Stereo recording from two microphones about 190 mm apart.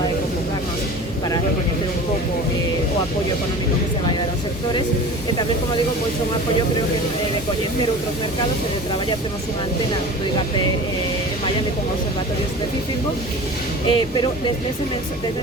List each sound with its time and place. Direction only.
13.8 s speech: 25° left (ahead or behind)